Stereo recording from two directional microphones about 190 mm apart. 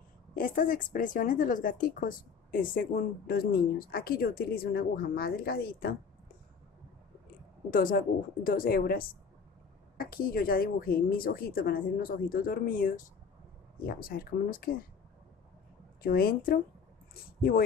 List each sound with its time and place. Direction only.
0.3 s speech: 45° left (ahead or behind)
7.7 s speech: 45° left (ahead or behind)
16.0 s speech: 50° left (ahead or behind)